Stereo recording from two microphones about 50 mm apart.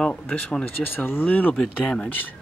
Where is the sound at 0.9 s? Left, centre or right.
Left.